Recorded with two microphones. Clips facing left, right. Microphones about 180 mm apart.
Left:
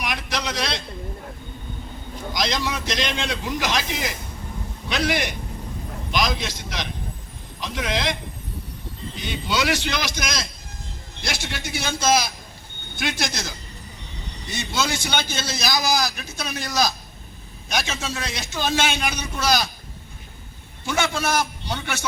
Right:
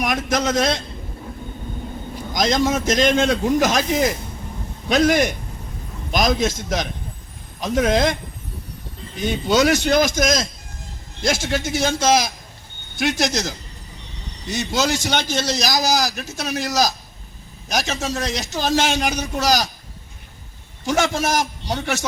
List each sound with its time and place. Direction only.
0.0 s a man's voice: 45° right (ahead or behind)
2.3 s a man's voice: 45° right (ahead or behind)
9.1 s a man's voice: 45° right (ahead or behind)
14.5 s a man's voice: 40° right (ahead or behind)
20.8 s a man's voice: 40° right (ahead or behind)